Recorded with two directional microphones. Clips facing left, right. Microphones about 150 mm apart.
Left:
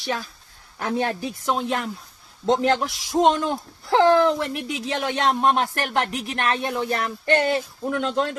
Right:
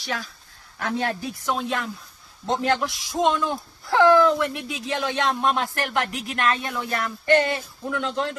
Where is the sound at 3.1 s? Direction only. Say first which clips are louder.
Left 4 dB; 40° left (ahead or behind).